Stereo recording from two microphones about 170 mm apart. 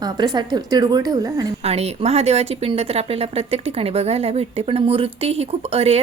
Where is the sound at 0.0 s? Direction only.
25° right (ahead or behind).